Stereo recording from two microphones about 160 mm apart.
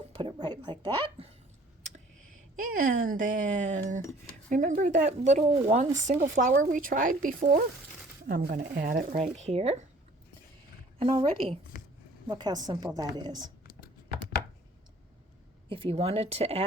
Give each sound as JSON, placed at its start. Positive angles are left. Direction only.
{"t": 0.1, "sound": "a sound", "side_deg": -30}
{"t": 2.6, "sound": "speech", "side_deg": -60}
{"t": 8.3, "sound": "speech", "side_deg": -75}
{"t": 9.1, "sound": "speech", "side_deg": -50}
{"t": 11.0, "sound": "speech", "side_deg": -35}
{"t": 11.7, "sound": "a sound", "side_deg": 60}
{"t": 12.3, "sound": "a woman's voice", "side_deg": -25}
{"t": 15.7, "sound": "speech", "side_deg": -35}